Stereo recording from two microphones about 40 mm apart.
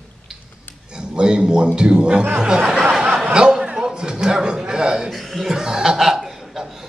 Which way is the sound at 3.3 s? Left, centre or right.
Right.